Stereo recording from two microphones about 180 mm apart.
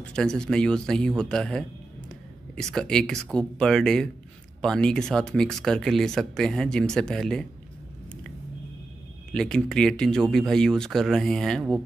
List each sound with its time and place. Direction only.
0.0 s speech: 5° left (ahead or behind)
9.3 s speech: 5° left (ahead or behind)